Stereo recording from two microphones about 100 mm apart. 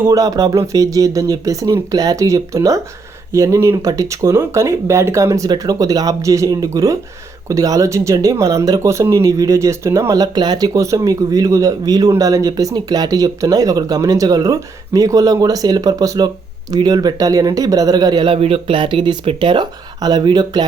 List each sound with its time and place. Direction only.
0.1 s speech: 35° right (ahead or behind)
18.3 s speech: 70° right (ahead or behind); by 20.7 s 45° right (ahead or behind)